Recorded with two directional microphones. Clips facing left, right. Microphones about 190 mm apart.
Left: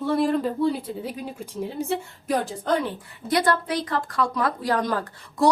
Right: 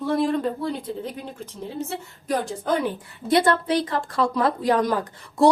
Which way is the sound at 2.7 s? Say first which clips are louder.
Even; 5° right (ahead or behind).